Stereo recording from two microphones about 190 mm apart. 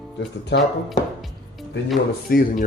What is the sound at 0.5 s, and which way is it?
Speech, 65° left (ahead or behind).